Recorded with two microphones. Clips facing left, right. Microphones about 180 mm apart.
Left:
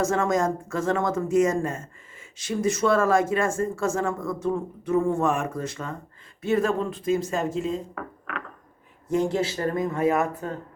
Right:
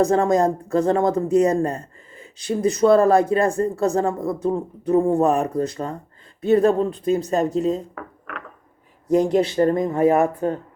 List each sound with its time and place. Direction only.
0.0 s speech: 35° right (ahead or behind)
7.9 s a sound: centre (ahead or behind)
9.6 s speech: 35° right (ahead or behind)